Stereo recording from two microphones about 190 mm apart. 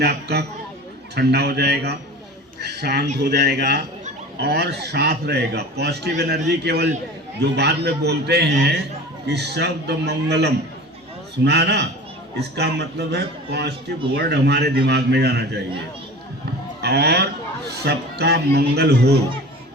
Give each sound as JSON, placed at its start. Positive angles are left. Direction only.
{"t": 0.0, "sound": "a man's voice", "side_deg": -60}
{"t": 16.8, "sound": "a man's voice", "side_deg": -60}